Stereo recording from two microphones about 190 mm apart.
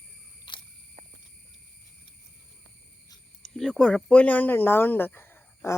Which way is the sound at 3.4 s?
Centre (ahead or behind).